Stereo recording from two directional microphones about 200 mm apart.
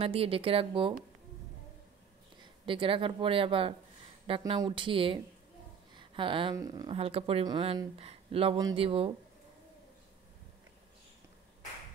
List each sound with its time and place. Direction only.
0.0 s a woman's voice: 30° right (ahead or behind)
2.6 s a woman's voice: 25° right (ahead or behind)